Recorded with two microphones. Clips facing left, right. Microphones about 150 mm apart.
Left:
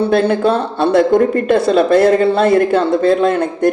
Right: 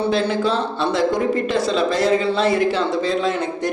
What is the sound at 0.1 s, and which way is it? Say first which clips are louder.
A man's voice: left 6 dB; 55° left (ahead or behind).